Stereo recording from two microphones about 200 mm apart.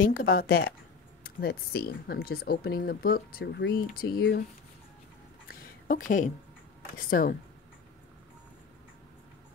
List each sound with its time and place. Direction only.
0.0 s speech: 45° left (ahead or behind)
5.5 s a sound: 40° left (ahead or behind)
7.0 s speech: 45° left (ahead or behind)